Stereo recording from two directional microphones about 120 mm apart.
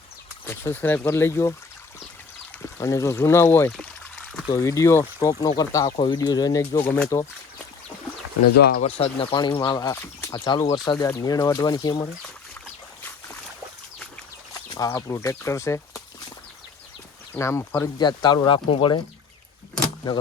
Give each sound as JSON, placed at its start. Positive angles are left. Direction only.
{"t": 0.4, "sound": "speech", "side_deg": 20}
{"t": 2.6, "sound": "speech", "side_deg": 25}
{"t": 8.8, "sound": "speech", "side_deg": 55}
{"t": 9.3, "sound": "speech", "side_deg": 40}
{"t": 14.7, "sound": "speech", "side_deg": 30}
{"t": 17.3, "sound": "speech", "side_deg": 20}
{"t": 17.9, "sound": "speech", "side_deg": 35}